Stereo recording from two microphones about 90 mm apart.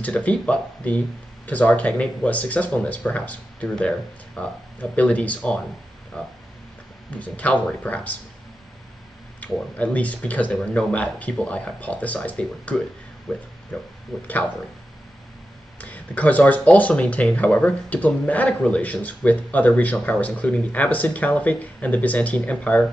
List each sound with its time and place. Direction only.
0.0 s speech: 15° left (ahead or behind)
9.4 s speech: 15° left (ahead or behind)
15.8 s speech: 15° left (ahead or behind)